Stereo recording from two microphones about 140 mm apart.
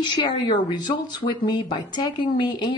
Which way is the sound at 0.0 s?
35° left (ahead or behind).